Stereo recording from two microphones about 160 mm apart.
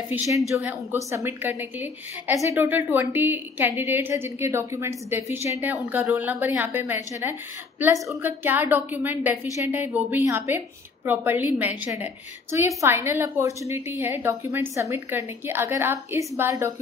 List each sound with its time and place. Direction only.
0.1 s a woman's voice: 10° right (ahead or behind)